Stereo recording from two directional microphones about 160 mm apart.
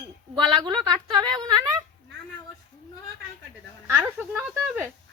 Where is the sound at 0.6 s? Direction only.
25° right (ahead or behind).